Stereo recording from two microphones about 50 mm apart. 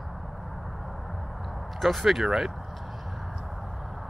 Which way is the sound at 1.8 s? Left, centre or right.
Centre.